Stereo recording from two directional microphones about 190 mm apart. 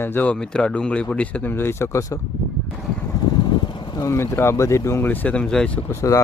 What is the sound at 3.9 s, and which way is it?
Speech, 15° left (ahead or behind).